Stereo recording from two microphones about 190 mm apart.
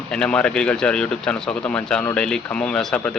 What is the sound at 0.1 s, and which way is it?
Speech, 5° left (ahead or behind).